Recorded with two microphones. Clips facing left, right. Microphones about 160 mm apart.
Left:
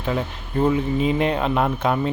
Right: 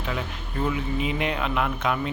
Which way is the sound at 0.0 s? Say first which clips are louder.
Left 6 dB; 35° left (ahead or behind).